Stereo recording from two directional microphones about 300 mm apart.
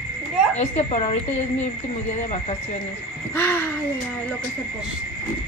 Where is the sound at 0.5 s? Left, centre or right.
Left.